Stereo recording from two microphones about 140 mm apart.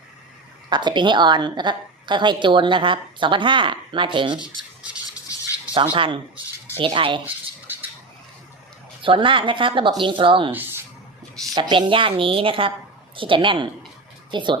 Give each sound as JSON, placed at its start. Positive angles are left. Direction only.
{"t": 0.7, "sound": "a woman's voice", "side_deg": -30}
{"t": 5.9, "sound": "a woman's voice", "side_deg": -40}
{"t": 9.0, "sound": "a woman's voice", "side_deg": -35}
{"t": 10.5, "sound": "a sound", "side_deg": -15}
{"t": 11.5, "sound": "a woman's voice", "side_deg": -30}